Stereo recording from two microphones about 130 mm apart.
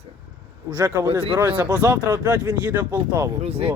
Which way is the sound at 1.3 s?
15° right (ahead or behind).